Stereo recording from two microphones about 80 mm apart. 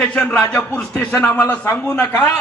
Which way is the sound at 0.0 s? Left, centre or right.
Centre.